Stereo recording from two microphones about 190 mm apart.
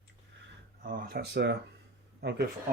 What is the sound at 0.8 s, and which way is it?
Speech, 50° right (ahead or behind).